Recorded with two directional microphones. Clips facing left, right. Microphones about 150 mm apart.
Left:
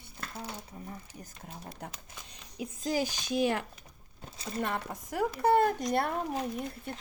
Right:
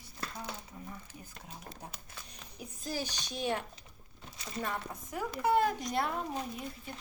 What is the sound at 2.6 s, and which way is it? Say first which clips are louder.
Speech: left 7 dB; 90° left.